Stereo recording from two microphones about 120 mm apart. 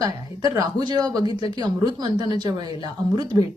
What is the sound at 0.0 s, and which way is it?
A woman's voice, 35° right (ahead or behind).